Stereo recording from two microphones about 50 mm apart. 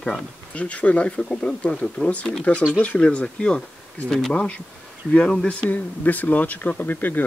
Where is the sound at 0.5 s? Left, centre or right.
Left.